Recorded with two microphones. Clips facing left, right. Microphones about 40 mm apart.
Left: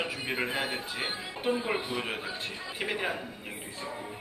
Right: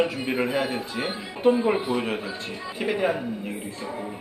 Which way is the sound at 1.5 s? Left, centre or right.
Centre.